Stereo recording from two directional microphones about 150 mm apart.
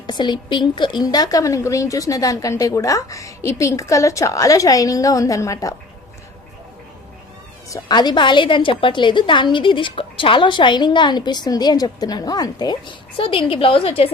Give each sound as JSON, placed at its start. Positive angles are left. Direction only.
{"t": 0.1, "sound": "a woman's voice", "side_deg": 30}
{"t": 7.7, "sound": "a woman's voice", "side_deg": 25}